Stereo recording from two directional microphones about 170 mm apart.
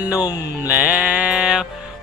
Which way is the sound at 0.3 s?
20° left (ahead or behind).